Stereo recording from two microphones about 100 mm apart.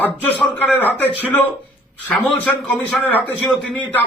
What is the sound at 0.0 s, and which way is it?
A man's voice, 15° left (ahead or behind).